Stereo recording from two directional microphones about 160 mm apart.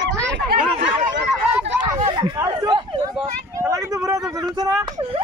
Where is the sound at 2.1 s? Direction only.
25° right (ahead or behind).